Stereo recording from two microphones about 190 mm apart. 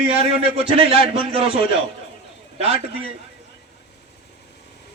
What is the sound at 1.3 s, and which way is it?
A man's voice, 30° right (ahead or behind).